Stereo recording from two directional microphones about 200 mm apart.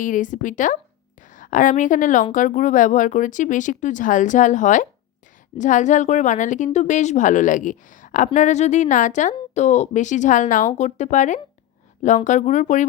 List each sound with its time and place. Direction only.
0.0 s a woman's voice: 40° left (ahead or behind)